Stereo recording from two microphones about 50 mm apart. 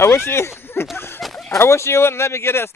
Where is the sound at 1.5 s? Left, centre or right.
Left.